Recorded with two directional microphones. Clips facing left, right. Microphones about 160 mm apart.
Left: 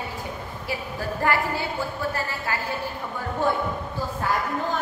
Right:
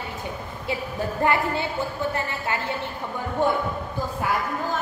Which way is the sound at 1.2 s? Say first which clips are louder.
Right 1 dB; 20° right (ahead or behind).